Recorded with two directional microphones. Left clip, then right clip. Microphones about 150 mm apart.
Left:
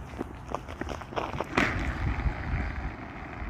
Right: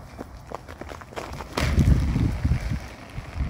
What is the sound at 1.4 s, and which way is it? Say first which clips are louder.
Boat: right 2 dB; 30° right (ahead or behind).